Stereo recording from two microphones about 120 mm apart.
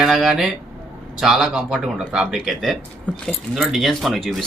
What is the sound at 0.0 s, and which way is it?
Speech, centre (ahead or behind).